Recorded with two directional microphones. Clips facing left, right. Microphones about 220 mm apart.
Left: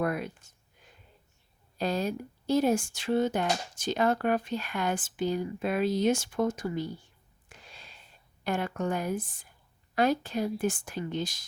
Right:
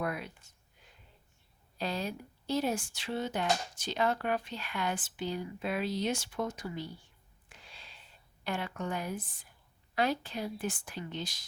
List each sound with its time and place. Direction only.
0.0 s speech: 45° left (ahead or behind)
1.8 s speech: 45° left (ahead or behind)
7.5 s a sound: 45° left (ahead or behind)
8.4 s speech: 45° left (ahead or behind)